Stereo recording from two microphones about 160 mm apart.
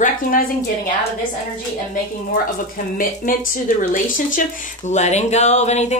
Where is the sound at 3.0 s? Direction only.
60° left (ahead or behind).